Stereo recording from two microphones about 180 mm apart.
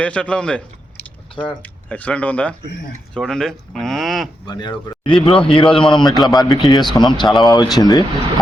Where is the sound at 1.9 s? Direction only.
10° left (ahead or behind).